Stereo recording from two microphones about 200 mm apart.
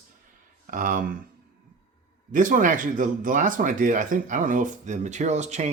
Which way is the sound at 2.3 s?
40° right (ahead or behind).